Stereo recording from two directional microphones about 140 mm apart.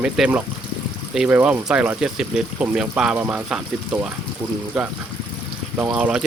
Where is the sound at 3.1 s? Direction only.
15° right (ahead or behind).